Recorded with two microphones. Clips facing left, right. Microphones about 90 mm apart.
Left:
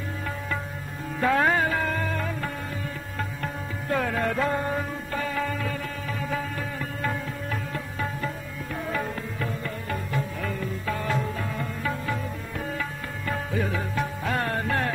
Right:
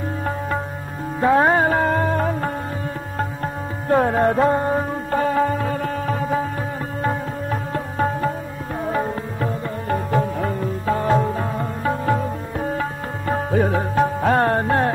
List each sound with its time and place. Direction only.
1.2 s music: 30° right (ahead or behind)
3.9 s music: 35° right (ahead or behind)